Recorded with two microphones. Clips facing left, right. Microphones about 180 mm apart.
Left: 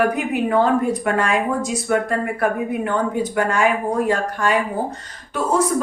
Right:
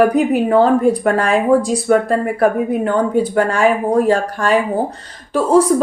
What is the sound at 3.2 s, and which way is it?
Speech, 35° right (ahead or behind).